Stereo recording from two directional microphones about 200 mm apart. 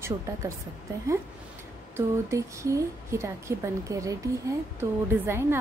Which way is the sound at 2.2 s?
15° right (ahead or behind).